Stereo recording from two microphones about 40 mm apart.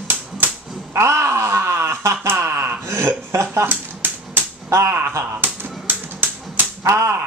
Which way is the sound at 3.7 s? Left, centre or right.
Right.